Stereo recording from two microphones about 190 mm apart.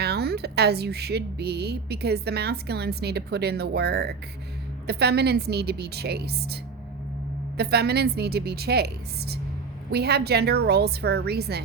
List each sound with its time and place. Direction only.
0.0 s a woman's voice: 60° right (ahead or behind)